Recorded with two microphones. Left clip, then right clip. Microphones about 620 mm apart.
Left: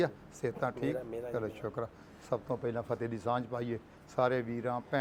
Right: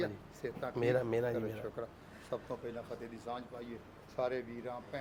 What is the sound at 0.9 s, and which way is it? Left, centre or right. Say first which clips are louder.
Speech: right 6 dB; right.